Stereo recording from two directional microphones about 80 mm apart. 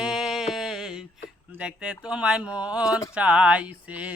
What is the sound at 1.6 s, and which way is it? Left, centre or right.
Speech, centre.